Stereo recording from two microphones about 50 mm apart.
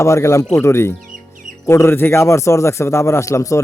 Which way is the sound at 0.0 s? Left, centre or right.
Left.